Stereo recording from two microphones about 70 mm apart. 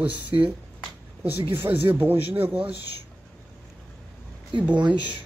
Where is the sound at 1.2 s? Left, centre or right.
Right.